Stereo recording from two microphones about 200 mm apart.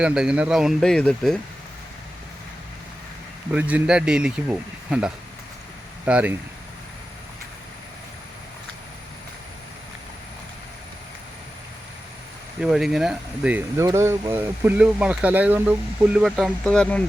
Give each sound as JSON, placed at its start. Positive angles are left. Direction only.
{"t": 0.0, "sound": "speech", "side_deg": -5}
{"t": 3.5, "sound": "speech", "side_deg": -10}
{"t": 12.5, "sound": "speech", "side_deg": -5}